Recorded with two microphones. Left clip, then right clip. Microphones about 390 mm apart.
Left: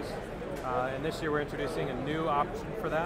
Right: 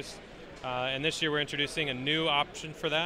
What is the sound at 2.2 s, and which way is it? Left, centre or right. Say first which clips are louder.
Speech: left 3 dB; right.